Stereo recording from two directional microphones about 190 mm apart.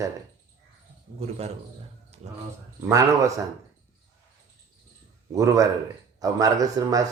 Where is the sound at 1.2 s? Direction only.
35° right (ahead or behind).